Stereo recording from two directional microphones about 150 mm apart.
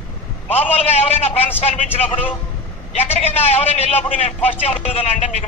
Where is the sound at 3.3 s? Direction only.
45° left (ahead or behind).